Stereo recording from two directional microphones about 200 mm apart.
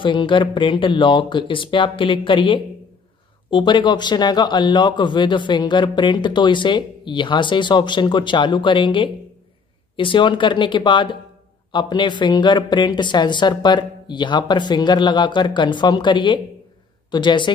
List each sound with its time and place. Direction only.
0.0 s a man's voice: 25° left (ahead or behind)